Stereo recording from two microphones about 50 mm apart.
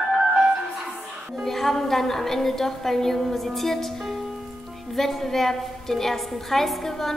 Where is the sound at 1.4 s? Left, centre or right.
Centre.